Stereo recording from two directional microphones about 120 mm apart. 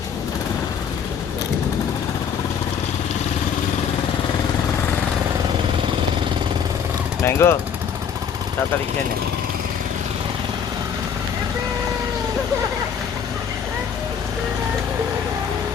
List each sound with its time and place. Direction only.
7.2 s speech: 20° left (ahead or behind)